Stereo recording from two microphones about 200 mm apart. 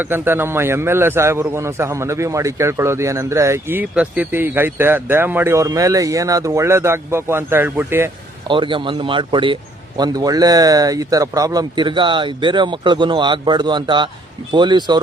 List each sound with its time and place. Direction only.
0.0 s a man's voice: 10° right (ahead or behind)
8.4 s speech: 25° right (ahead or behind)